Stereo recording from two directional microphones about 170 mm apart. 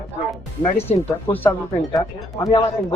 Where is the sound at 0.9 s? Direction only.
10° left (ahead or behind).